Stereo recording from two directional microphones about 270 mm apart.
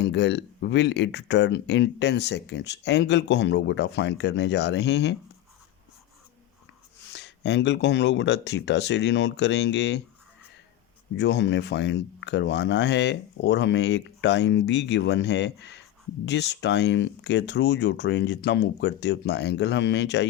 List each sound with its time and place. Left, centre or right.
0.0 s speech: left
7.1 s speech: left
11.2 s speech: left